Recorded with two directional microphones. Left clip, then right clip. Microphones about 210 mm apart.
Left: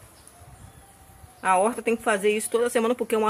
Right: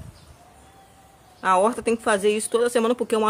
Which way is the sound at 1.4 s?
15° right (ahead or behind).